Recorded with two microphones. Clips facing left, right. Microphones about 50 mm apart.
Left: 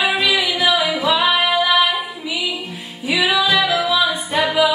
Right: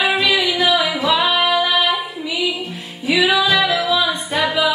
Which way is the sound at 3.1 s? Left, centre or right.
Centre.